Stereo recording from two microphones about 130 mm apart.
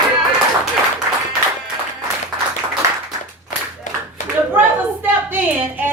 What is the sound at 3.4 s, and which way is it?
Clapping, 70° left (ahead or behind).